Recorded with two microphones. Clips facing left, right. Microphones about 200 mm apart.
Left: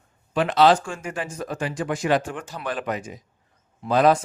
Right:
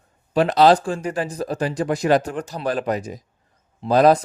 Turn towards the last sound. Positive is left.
turn(degrees=-35)  # may be behind; listen again after turning